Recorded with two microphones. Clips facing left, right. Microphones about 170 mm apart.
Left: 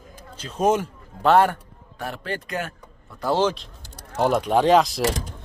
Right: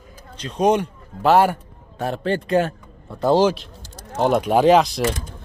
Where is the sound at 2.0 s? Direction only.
25° right (ahead or behind).